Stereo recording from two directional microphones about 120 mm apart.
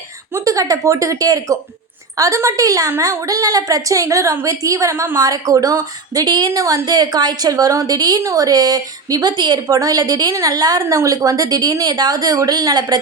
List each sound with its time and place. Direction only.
0.3 s a woman's voice: 30° right (ahead or behind)